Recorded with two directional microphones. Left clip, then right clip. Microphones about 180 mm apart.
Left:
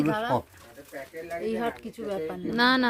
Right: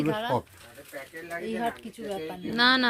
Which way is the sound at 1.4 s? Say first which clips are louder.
Left 1 dB; 60° left (ahead or behind).